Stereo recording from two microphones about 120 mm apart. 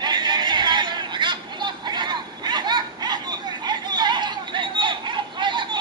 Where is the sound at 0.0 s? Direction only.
40° right (ahead or behind).